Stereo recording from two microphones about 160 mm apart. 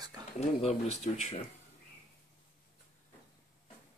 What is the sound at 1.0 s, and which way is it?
Speech, 45° left (ahead or behind).